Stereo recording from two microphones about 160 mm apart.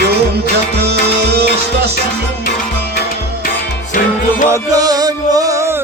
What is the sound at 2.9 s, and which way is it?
Music, 70° left (ahead or behind).